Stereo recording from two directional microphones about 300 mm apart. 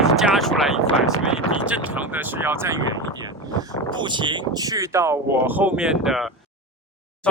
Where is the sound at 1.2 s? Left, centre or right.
Centre.